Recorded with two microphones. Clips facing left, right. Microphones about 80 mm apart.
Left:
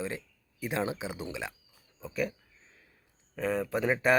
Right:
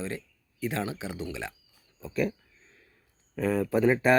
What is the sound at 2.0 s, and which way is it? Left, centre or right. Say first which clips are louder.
Speech: right 4 dB; centre.